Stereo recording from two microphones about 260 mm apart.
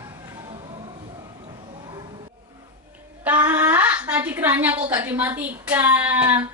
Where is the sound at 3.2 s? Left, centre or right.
Centre.